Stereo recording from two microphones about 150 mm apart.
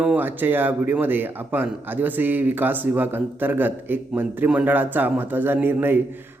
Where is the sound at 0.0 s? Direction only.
10° right (ahead or behind).